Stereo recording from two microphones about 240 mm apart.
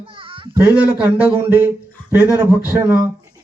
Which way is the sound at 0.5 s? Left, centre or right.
Centre.